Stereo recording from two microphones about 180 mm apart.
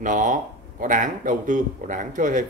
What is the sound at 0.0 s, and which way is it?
Speech, 45° right (ahead or behind).